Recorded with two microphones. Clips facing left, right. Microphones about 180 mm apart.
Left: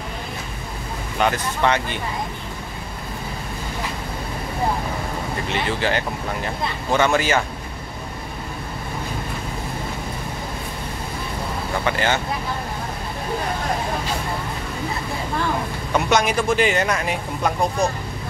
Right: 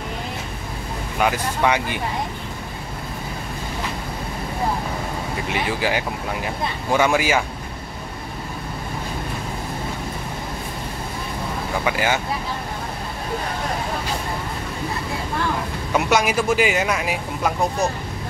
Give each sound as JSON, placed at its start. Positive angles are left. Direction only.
{"t": 1.2, "sound": "speech", "side_deg": -10}
{"t": 5.5, "sound": "speech", "side_deg": -10}
{"t": 11.8, "sound": "speech", "side_deg": -10}
{"t": 15.9, "sound": "speech", "side_deg": -5}